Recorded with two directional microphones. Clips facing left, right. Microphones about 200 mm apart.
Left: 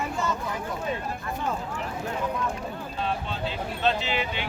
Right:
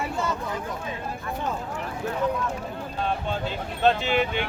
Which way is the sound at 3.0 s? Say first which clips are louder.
Right 3 dB; 50° right (ahead or behind).